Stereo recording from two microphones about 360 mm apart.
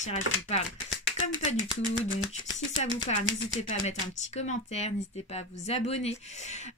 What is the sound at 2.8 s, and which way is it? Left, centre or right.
Speech, centre.